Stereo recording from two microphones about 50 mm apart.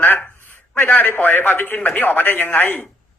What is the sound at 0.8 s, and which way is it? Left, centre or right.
A man's voice, left.